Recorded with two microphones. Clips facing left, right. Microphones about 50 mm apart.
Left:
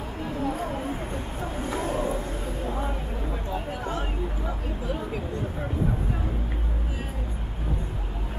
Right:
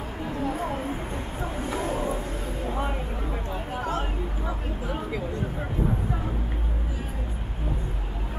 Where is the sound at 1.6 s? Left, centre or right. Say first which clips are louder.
Left 1 dB; centre.